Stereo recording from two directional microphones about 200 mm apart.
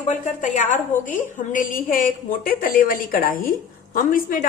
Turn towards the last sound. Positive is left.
turn(degrees=40)  # may be behind; listen again after turning